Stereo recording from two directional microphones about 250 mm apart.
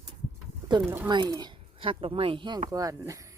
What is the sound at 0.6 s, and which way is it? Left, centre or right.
Speech, centre.